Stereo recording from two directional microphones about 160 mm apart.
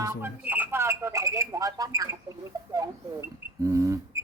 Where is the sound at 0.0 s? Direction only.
15° right (ahead or behind).